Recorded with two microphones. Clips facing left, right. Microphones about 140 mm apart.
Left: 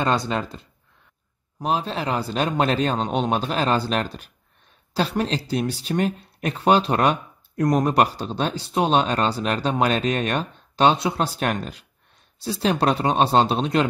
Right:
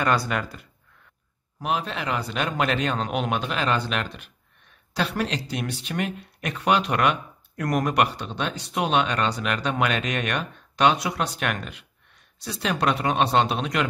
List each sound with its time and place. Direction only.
0.0 s speech: 25° left (ahead or behind)